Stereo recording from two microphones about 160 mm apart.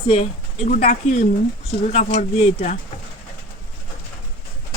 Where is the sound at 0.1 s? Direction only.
40° left (ahead or behind).